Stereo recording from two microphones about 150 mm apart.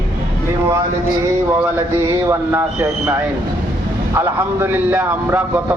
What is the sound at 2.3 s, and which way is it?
Speech, 15° right (ahead or behind).